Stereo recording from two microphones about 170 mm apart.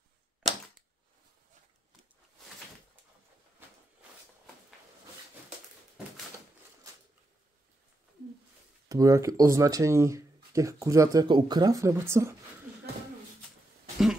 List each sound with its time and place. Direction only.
8.8 s speech: 20° right (ahead or behind)